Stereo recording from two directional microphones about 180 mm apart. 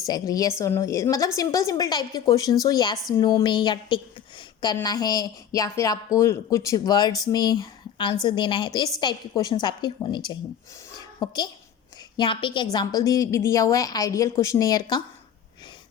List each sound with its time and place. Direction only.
0.1 s a woman's voice: 20° left (ahead or behind)
10.9 s a sound: 25° left (ahead or behind)
12.1 s a woman's voice: 25° left (ahead or behind)